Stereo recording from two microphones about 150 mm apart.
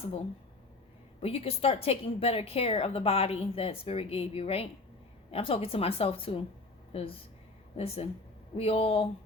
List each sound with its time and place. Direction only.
1.2 s a woman's voice: 40° left (ahead or behind)